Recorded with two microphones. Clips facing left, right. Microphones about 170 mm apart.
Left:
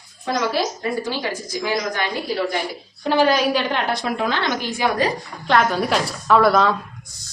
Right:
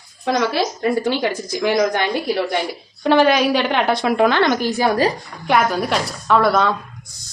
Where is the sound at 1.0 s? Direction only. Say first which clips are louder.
Right 6 dB; 65° right (ahead or behind).